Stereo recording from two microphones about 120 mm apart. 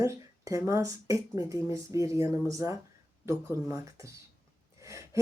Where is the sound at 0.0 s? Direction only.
25° right (ahead or behind).